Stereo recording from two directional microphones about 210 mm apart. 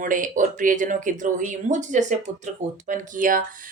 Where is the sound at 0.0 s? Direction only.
40° right (ahead or behind).